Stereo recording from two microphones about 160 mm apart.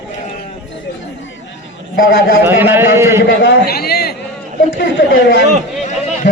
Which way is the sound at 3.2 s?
90° left.